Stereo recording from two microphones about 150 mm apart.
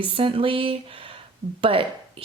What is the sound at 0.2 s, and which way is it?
Speech, 35° right (ahead or behind).